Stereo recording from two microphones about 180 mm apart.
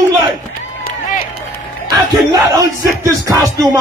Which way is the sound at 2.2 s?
20° right (ahead or behind).